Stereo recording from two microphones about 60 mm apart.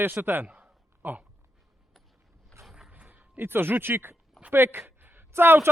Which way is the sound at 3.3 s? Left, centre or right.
Right.